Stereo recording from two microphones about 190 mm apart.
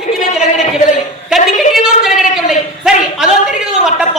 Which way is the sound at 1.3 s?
5° right (ahead or behind).